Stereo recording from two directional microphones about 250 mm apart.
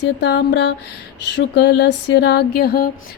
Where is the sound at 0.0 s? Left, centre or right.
Left.